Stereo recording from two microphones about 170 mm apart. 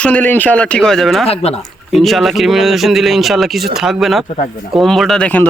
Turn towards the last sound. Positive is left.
turn(degrees=10)  # may be behind; listen again after turning